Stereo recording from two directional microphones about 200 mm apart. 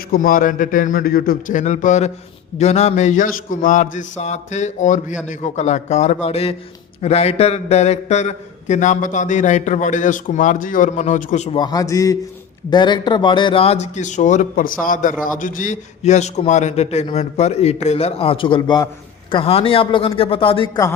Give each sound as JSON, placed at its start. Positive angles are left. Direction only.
{"t": 0.1, "sound": "a man's voice", "side_deg": 45}
{"t": 11.6, "sound": "a man's voice", "side_deg": 20}